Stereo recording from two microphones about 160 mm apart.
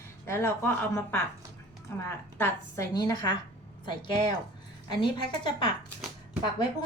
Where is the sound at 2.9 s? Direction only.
25° left (ahead or behind).